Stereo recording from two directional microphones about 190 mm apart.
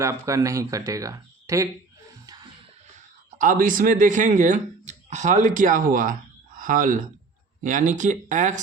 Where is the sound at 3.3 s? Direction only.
45° right (ahead or behind).